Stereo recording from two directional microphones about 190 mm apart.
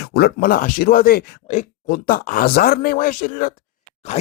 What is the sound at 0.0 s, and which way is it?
Speech, 55° left (ahead or behind).